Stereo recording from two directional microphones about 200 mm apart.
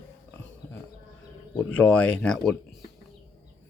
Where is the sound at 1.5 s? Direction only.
5° left (ahead or behind).